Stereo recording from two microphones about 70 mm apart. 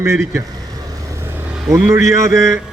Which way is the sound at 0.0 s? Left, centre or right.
Right.